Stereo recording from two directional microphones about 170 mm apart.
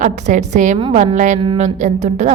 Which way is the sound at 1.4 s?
35° right (ahead or behind).